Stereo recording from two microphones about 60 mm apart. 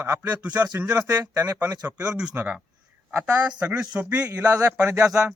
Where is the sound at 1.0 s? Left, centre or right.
Right.